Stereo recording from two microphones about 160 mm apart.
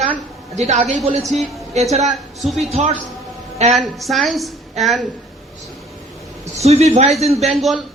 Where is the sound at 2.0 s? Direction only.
Centre (ahead or behind).